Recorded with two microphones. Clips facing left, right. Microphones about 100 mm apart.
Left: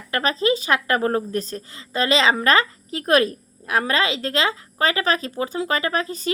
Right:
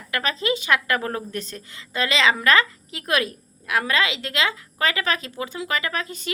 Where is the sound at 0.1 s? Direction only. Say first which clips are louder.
Left 4 dB; 35° left (ahead or behind).